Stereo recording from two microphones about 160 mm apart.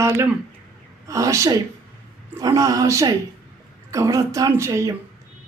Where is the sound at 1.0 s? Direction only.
20° right (ahead or behind).